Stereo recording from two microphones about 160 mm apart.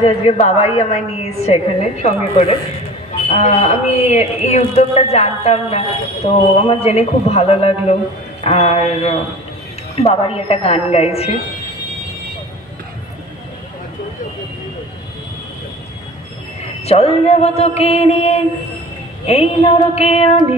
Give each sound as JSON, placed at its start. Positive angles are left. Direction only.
{"t": 0.0, "sound": "a woman's voice", "side_deg": 40}
{"t": 16.8, "sound": "a woman's voice", "side_deg": 40}